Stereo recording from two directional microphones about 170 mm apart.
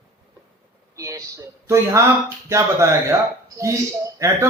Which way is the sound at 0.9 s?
20° right (ahead or behind).